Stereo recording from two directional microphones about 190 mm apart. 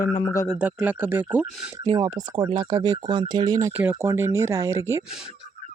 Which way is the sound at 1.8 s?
20° right (ahead or behind).